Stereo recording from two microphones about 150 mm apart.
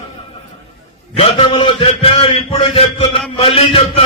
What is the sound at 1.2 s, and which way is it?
A man's voice, 40° left (ahead or behind).